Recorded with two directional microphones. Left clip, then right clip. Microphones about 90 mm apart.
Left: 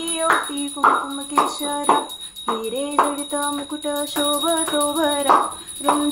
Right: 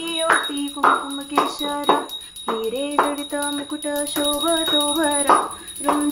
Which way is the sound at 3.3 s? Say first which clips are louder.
Left 1 dB; 10° left (ahead or behind).